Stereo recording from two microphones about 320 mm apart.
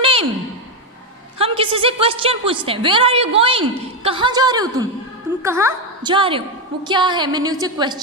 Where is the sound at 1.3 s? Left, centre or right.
Centre.